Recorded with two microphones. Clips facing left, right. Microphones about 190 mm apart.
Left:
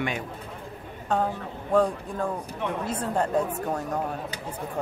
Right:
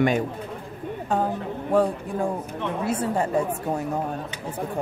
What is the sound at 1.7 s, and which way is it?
Speech, 10° right (ahead or behind).